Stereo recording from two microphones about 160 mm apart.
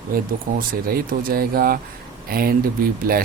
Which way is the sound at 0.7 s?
65° right (ahead or behind).